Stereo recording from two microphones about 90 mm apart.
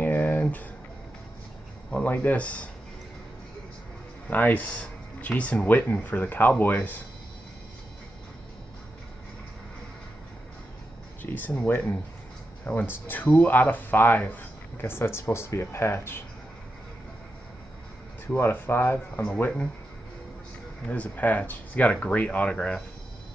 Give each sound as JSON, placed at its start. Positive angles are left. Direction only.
{"t": 0.0, "sound": "a sound", "side_deg": 20}
{"t": 1.9, "sound": "speech", "side_deg": 15}
{"t": 4.3, "sound": "speech", "side_deg": 20}
{"t": 11.2, "sound": "speech", "side_deg": 20}
{"t": 18.3, "sound": "speech", "side_deg": 25}
{"t": 19.2, "sound": "speech", "side_deg": 15}
{"t": 20.8, "sound": "speech", "side_deg": 15}